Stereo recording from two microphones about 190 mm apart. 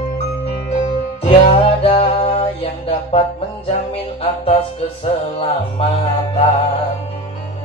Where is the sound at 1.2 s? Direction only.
30° left (ahead or behind).